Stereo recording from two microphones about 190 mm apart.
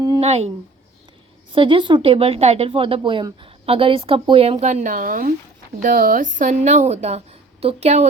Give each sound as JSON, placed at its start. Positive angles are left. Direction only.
{"t": 0.2, "sound": "a woman's voice", "side_deg": -35}